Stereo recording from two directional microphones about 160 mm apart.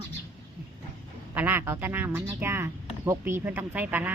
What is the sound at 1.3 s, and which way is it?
Speech, 15° right (ahead or behind).